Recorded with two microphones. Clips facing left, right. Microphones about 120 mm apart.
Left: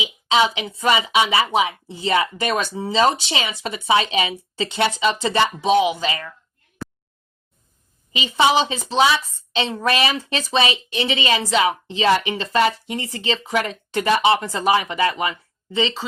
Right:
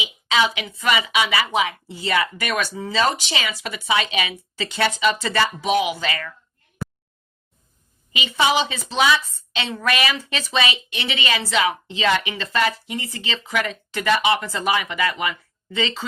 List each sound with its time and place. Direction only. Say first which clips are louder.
0.0 s a woman's voice: left 3 dB; 25° left (ahead or behind)
8.3 s speech: left 3 dB; 30° left (ahead or behind)